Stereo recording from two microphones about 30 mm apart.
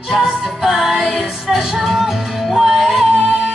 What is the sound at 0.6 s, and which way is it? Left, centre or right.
Music, centre.